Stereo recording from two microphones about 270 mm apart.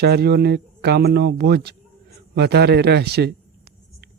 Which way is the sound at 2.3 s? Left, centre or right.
Right.